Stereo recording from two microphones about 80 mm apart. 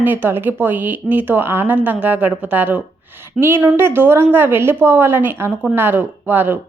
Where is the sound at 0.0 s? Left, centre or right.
Right.